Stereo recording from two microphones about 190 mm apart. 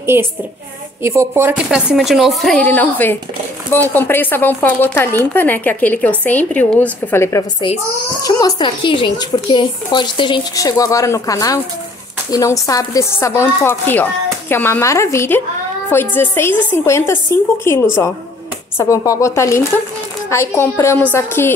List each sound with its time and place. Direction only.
0.0 s a woman's voice: 10° right (ahead or behind); by 21.5 s 10° left (ahead or behind)